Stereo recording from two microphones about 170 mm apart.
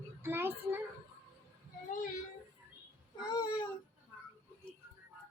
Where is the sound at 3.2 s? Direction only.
25° left (ahead or behind).